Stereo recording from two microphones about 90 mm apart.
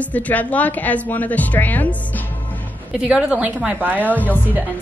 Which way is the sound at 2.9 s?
10° right (ahead or behind).